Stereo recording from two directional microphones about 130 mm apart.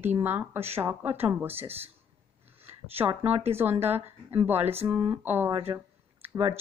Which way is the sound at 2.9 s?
15° right (ahead or behind).